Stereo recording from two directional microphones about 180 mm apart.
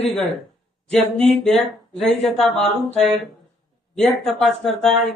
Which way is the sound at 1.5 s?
35° left (ahead or behind).